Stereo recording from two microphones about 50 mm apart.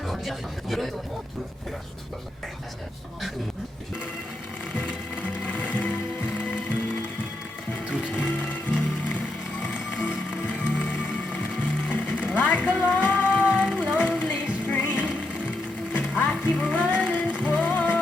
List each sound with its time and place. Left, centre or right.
0.0 s speech: centre
5.2 s music: left
8.3 s music: left
14.7 s music: left